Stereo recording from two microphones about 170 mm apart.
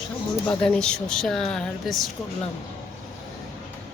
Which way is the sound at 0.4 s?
5° left (ahead or behind).